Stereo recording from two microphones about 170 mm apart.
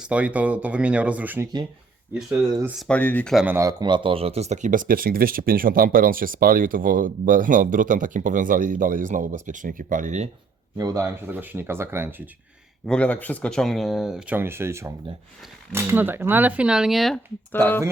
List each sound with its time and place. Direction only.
0.0 s speech: 5° right (ahead or behind)
2.7 s speech: 5° left (ahead or behind)
3.3 s speech: 10° right (ahead or behind); by 10.2 s 45° right (ahead or behind)
10.8 s speech: 20° right (ahead or behind)
12.8 s speech: 5° left (ahead or behind)
17.5 s speech: 10° left (ahead or behind)